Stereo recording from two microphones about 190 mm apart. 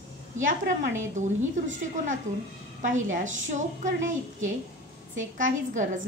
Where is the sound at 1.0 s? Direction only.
40° right (ahead or behind).